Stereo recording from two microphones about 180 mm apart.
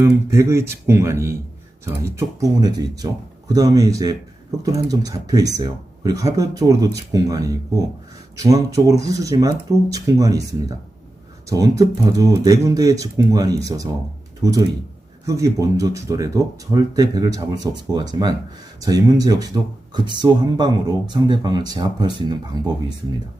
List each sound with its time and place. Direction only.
0.0 s speech: 15° right (ahead or behind)